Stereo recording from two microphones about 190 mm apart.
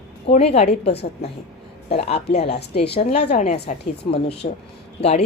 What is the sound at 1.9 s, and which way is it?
Speech, 35° left (ahead or behind).